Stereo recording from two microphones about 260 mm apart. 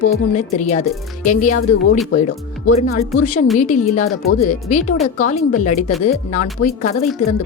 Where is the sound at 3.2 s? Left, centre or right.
Left.